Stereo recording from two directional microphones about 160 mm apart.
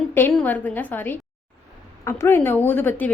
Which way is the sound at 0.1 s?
15° left (ahead or behind).